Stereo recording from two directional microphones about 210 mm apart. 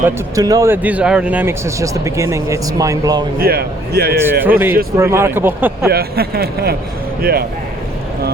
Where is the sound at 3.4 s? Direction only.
45° right (ahead or behind).